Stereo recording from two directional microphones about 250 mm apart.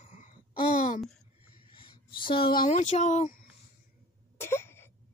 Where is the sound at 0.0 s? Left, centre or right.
Left.